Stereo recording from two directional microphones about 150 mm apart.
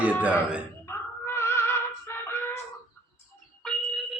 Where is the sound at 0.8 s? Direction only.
15° left (ahead or behind).